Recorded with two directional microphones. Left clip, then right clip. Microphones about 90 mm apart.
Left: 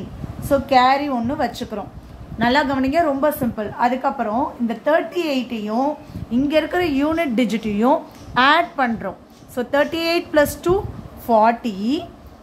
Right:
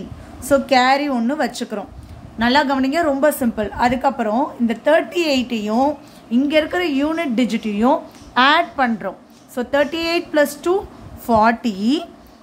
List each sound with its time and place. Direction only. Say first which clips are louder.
0.5 s a woman's voice: right 1 dB; 65° right (ahead or behind)
2.3 s a woman's voice: right 2 dB; 35° right (ahead or behind)
3.2 s a woman's voice: right 3 dB; 75° right (ahead or behind); by 5.9 s 90° right
6.5 s a woman's voice: even; 15° right (ahead or behind)
11.2 s a woman's voice: even; 40° right (ahead or behind)